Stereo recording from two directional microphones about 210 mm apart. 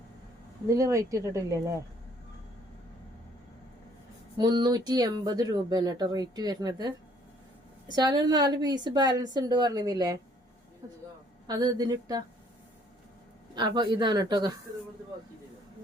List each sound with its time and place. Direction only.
0.7 s speech: 15° right (ahead or behind)
4.4 s speech: 20° right (ahead or behind)
11.4 s speech: 20° right (ahead or behind)
13.5 s speech: 20° right (ahead or behind)